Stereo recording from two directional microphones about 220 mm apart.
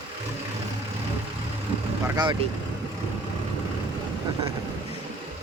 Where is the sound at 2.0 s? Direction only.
20° right (ahead or behind).